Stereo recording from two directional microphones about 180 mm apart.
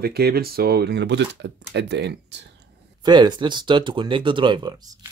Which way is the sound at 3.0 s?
25° right (ahead or behind).